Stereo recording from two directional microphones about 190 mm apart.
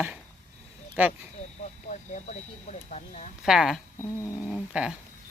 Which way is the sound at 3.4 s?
Centre (ahead or behind).